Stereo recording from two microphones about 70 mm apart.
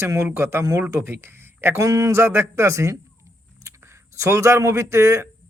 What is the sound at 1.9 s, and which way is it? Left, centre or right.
Speech, right.